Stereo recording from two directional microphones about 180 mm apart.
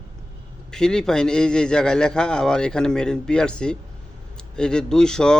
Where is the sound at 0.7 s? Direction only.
5° left (ahead or behind).